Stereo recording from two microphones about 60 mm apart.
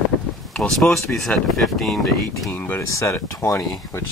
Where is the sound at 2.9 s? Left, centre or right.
Left.